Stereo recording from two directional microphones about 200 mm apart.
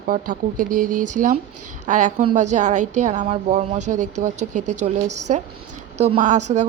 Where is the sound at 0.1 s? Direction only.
45° right (ahead or behind).